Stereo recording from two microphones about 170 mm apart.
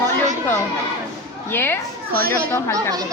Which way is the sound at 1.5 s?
15° left (ahead or behind).